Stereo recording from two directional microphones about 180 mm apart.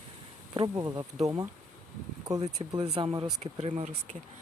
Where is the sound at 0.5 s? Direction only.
25° right (ahead or behind).